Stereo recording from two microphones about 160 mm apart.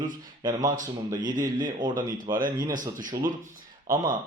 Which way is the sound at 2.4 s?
60° right (ahead or behind).